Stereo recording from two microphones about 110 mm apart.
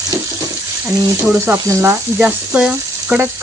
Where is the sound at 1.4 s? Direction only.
25° right (ahead or behind).